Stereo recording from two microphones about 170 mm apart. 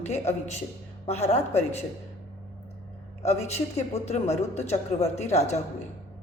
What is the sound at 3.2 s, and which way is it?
Speech, 40° left (ahead or behind).